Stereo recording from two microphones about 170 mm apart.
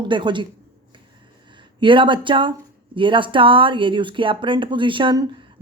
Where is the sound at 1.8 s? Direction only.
30° right (ahead or behind).